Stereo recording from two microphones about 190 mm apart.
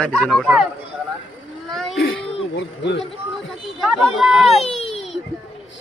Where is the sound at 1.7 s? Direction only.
Centre (ahead or behind).